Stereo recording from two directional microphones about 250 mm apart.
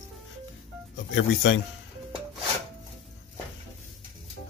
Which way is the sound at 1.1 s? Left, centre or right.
Left.